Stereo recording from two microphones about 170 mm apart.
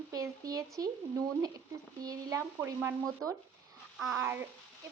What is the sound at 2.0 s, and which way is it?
Speech, 20° right (ahead or behind).